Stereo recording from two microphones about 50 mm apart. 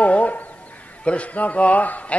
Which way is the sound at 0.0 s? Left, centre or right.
Left.